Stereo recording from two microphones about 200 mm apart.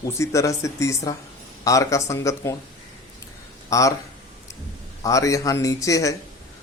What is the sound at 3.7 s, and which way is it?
Speech, 15° left (ahead or behind).